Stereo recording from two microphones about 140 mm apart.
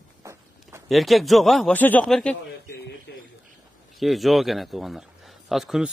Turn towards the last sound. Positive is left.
turn(degrees=-5)  # may be behind; listen again after turning